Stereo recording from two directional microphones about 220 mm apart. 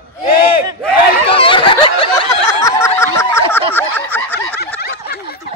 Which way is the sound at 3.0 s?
10° left (ahead or behind).